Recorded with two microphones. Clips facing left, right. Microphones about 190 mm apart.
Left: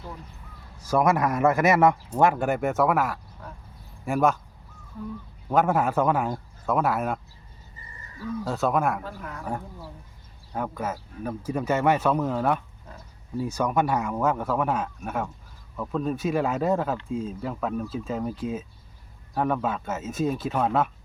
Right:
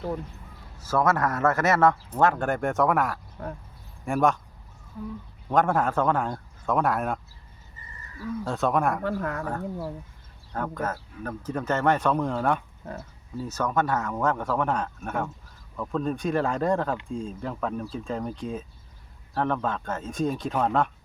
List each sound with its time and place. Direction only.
0.8 s a man's voice: 15° left (ahead or behind)
5.5 s a man's voice: 5° left (ahead or behind)
8.4 s speech: centre (ahead or behind)
9.0 s speech: 70° right (ahead or behind)
10.5 s a man's voice: 10° left (ahead or behind)